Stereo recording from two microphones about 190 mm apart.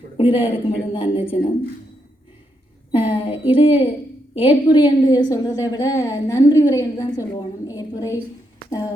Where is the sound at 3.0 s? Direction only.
30° left (ahead or behind).